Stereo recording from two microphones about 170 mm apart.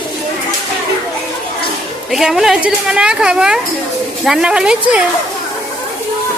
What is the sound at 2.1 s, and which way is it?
A woman's voice, centre (ahead or behind).